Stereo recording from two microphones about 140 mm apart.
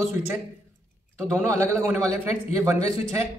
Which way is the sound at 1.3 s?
15° right (ahead or behind).